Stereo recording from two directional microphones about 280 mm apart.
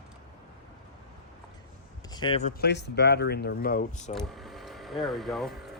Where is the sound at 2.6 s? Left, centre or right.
Left.